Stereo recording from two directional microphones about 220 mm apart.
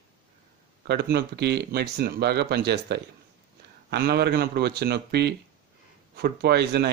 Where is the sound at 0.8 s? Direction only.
50° right (ahead or behind).